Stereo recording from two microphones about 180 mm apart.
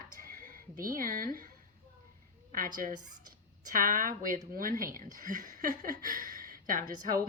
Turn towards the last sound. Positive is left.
turn(degrees=-50)  # may be behind; listen again after turning